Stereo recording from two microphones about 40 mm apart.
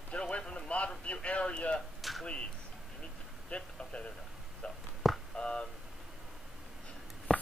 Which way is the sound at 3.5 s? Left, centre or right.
Left.